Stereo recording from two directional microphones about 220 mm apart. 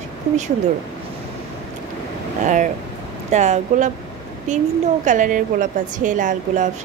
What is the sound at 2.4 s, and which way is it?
A woman's voice, 35° right (ahead or behind).